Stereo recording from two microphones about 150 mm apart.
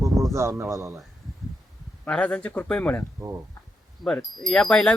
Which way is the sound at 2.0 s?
5° left (ahead or behind).